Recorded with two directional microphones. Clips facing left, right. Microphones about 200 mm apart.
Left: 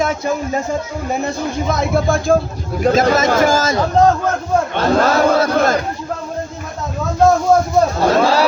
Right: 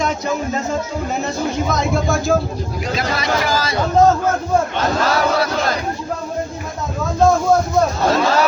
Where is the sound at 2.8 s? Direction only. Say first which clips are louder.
Left 11 dB; 50° left (ahead or behind).